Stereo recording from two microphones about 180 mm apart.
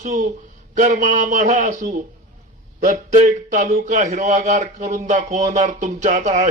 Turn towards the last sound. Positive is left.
turn(degrees=-40)  # may be behind; listen again after turning